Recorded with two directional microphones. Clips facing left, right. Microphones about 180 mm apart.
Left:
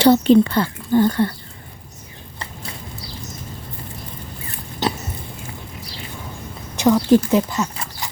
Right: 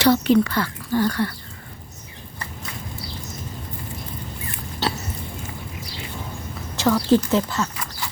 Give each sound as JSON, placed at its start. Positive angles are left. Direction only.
{"t": 0.0, "sound": "speech", "side_deg": 25}
{"t": 4.8, "sound": "a sound", "side_deg": 20}
{"t": 6.7, "sound": "speech", "side_deg": 15}